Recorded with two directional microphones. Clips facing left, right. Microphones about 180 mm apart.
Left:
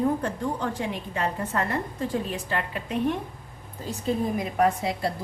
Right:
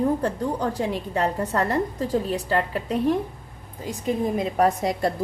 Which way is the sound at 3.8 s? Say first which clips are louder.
Right 2 dB; 15° right (ahead or behind).